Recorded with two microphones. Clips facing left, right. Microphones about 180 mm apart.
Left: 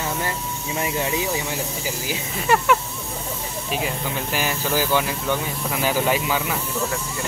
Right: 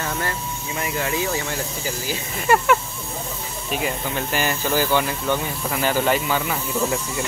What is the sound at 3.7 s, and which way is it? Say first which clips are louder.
Speech: right 1 dB; centre (ahead or behind).